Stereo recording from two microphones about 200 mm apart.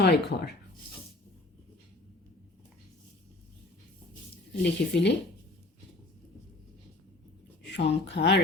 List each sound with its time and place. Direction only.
0.0 s speech: 55° left (ahead or behind)
4.6 s speech: 60° left (ahead or behind)
7.6 s speech: 60° left (ahead or behind)